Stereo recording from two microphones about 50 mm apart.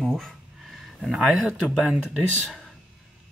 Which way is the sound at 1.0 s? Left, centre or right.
Centre.